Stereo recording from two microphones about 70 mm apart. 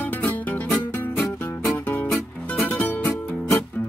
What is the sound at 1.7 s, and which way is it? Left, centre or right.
Music, left.